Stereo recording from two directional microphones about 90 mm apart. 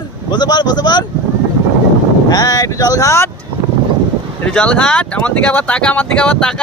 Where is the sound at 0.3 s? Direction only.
50° left (ahead or behind).